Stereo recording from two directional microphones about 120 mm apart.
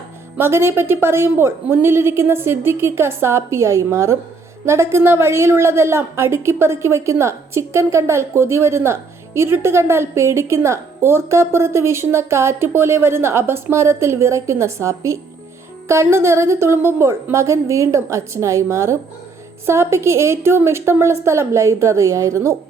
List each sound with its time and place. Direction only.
0.3 s a woman's voice: 20° right (ahead or behind)